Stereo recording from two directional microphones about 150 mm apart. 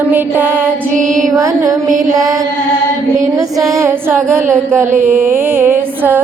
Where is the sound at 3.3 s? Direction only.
20° right (ahead or behind).